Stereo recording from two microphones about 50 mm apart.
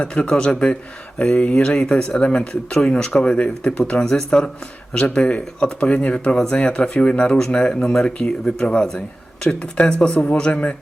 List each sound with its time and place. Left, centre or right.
0.0 s speech: left